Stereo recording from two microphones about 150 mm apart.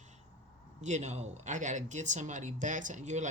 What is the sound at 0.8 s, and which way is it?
Speech, 50° right (ahead or behind).